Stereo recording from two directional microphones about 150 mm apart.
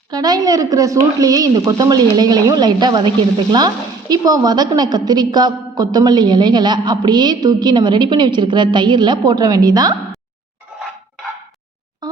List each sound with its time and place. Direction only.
0.1 s a woman's voice: 25° right (ahead or behind)
4.1 s a woman's voice: 25° right (ahead or behind)